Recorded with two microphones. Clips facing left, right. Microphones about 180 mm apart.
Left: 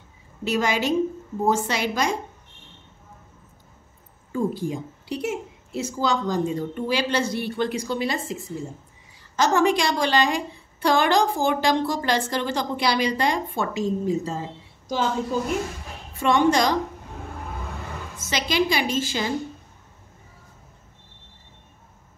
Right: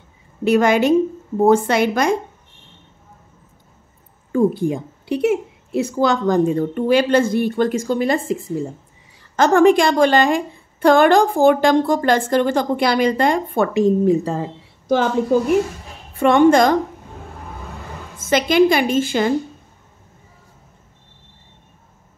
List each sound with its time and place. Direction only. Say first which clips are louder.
0.4 s a woman's voice: right 9 dB; 55° right (ahead or behind)
4.3 s a woman's voice: right 8 dB; 60° right (ahead or behind)
16.2 s a woman's voice: right 7 dB; 55° right (ahead or behind)
18.1 s a woman's voice: right 9 dB; 55° right (ahead or behind)